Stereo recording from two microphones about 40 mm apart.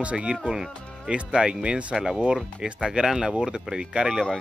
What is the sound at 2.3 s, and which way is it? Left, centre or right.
Speech, centre.